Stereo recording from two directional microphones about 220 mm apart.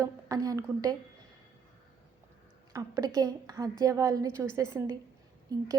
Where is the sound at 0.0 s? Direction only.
15° right (ahead or behind).